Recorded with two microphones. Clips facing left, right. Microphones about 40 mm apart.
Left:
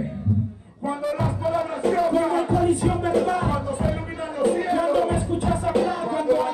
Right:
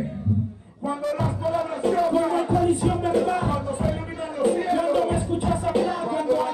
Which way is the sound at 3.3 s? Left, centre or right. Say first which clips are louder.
Left 1 dB; centre.